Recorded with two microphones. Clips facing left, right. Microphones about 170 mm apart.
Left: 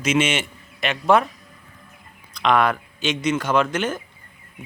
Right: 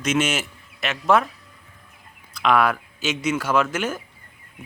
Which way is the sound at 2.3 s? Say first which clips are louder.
Even; 5° right (ahead or behind).